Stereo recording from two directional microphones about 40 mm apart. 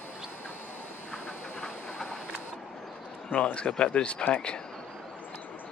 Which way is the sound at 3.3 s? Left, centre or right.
Left.